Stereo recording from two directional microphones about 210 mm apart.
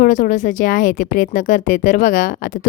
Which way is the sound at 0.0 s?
40° left (ahead or behind).